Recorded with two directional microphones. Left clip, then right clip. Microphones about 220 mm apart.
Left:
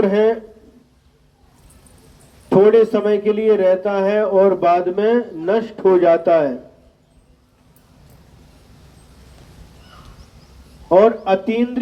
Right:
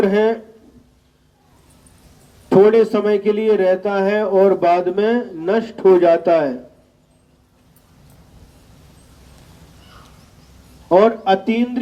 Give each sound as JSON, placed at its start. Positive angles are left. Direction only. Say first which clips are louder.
{"t": 0.0, "sound": "a man's voice", "louder": "even", "side_deg": -35}
{"t": 2.5, "sound": "a man's voice", "louder": "even", "side_deg": -35}
{"t": 10.8, "sound": "a man's voice", "louder": "even", "side_deg": -40}